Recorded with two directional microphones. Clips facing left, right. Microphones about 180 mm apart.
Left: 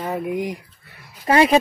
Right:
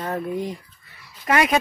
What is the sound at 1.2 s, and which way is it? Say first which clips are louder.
Speech: left 4 dB; 30° left (ahead or behind).